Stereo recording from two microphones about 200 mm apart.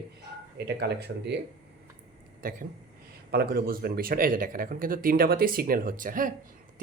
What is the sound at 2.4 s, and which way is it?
Speech, 45° right (ahead or behind).